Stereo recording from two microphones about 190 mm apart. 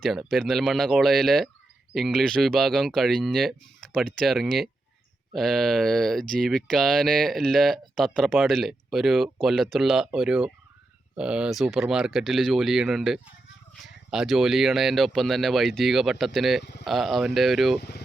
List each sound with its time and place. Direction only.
0.0 s speech: centre (ahead or behind)
17.7 s speech: 60° left (ahead or behind)